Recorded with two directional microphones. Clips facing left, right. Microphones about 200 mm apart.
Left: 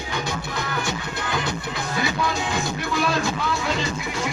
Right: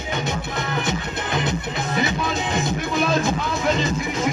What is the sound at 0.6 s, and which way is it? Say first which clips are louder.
Music: right 3 dB; 20° right (ahead or behind).